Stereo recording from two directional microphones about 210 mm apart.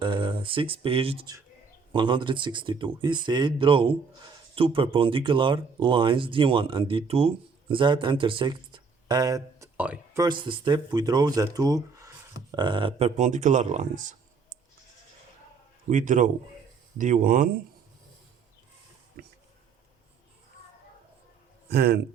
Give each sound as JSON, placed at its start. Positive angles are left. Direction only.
{"t": 0.0, "sound": "speech", "side_deg": -25}
{"t": 10.2, "sound": "speech", "side_deg": -20}
{"t": 15.9, "sound": "speech", "side_deg": -35}
{"t": 19.2, "sound": "a sound", "side_deg": -45}
{"t": 21.7, "sound": "speech", "side_deg": -50}